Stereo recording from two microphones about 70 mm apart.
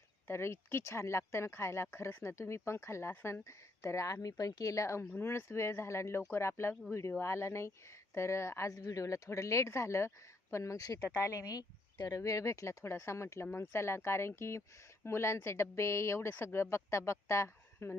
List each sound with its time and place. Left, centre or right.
0.3 s speech: left